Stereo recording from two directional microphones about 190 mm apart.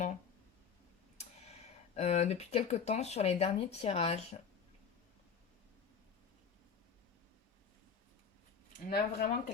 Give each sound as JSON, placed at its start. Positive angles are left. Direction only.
{"t": 1.2, "sound": "speech", "side_deg": 35}
{"t": 8.8, "sound": "speech", "side_deg": 50}